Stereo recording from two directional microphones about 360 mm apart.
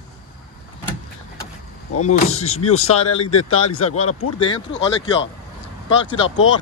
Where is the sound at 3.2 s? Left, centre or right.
Left.